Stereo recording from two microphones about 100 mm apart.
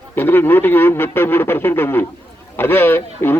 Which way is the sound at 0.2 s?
20° left (ahead or behind).